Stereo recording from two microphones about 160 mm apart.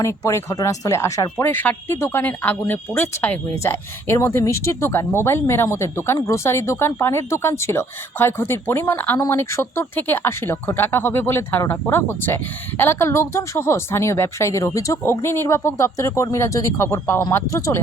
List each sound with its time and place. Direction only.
0.0 s speech: 20° left (ahead or behind)